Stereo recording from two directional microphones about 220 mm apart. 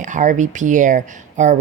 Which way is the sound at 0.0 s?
35° right (ahead or behind).